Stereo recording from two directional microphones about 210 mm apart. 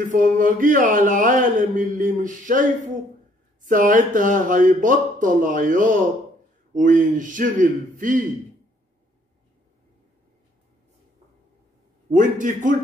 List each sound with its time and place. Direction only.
0.0 s speech: 40° right (ahead or behind)
12.1 s speech: 40° right (ahead or behind)